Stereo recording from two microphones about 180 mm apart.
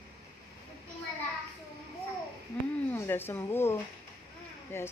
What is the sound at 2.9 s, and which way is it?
Speech, 10° left (ahead or behind).